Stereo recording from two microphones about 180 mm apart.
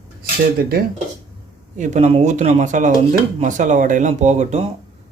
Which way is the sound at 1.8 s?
40° right (ahead or behind).